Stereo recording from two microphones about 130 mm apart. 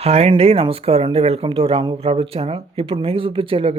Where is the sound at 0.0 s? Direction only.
55° right (ahead or behind).